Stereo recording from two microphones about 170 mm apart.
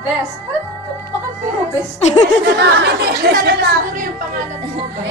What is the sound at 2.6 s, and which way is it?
Speech, 80° right.